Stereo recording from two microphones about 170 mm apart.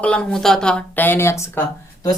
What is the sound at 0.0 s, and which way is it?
Speech, 5° left (ahead or behind).